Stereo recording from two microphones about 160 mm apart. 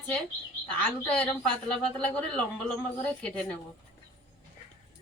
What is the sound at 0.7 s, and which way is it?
Speech, 10° left (ahead or behind).